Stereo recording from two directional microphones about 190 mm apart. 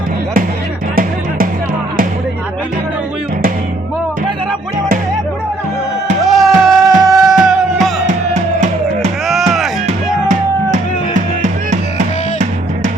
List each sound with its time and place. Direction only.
6.2 s music: centre (ahead or behind)
8.0 s music: 40° right (ahead or behind)
9.2 s music: centre (ahead or behind)
10.2 s music: 40° right (ahead or behind)